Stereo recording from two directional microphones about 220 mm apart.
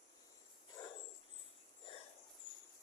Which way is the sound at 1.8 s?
25° left (ahead or behind).